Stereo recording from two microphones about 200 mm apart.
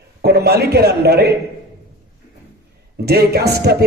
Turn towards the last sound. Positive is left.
turn(degrees=-55)  # may be behind; listen again after turning